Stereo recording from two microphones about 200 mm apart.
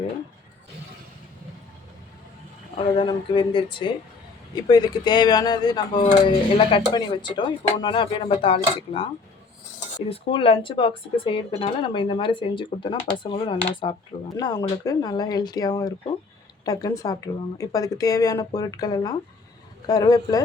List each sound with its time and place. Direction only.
2.7 s speech: 30° left (ahead or behind)
10.1 s speech: 30° left (ahead or behind)